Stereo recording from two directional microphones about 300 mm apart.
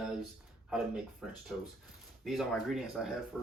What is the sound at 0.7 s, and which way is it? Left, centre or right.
Speech, centre.